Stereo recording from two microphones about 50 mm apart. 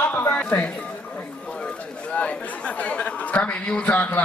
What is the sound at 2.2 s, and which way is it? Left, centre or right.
A man's voice, left.